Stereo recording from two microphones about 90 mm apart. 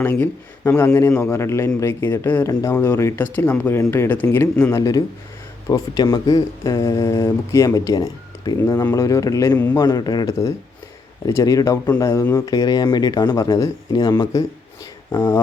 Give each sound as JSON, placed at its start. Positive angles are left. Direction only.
{"t": 0.0, "sound": "speech", "side_deg": 25}
{"t": 2.5, "sound": "speech", "side_deg": 40}
{"t": 2.7, "sound": "speech", "side_deg": 25}
{"t": 4.8, "sound": "speech", "side_deg": 40}
{"t": 7.9, "sound": "speech", "side_deg": 45}
{"t": 11.3, "sound": "speech", "side_deg": 35}
{"t": 13.3, "sound": "speech", "side_deg": 40}